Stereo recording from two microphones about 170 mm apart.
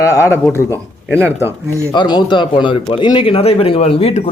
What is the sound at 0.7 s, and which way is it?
Speech, 15° right (ahead or behind).